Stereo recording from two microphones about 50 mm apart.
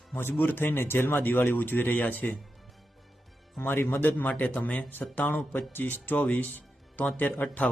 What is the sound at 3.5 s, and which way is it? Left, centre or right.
Speech, left.